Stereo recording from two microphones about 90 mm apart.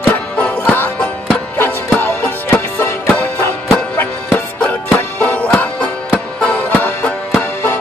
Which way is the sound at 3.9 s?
15° left (ahead or behind).